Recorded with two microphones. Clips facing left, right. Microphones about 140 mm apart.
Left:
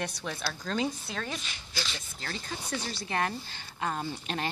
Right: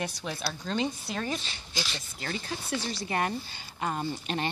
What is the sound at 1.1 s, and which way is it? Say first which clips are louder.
Speech: right 4 dB; 10° right (ahead or behind).